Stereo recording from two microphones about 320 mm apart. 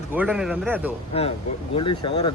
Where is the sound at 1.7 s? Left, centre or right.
Centre.